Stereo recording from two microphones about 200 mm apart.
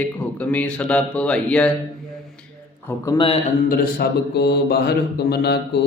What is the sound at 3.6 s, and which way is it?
Mantra, 45° left (ahead or behind).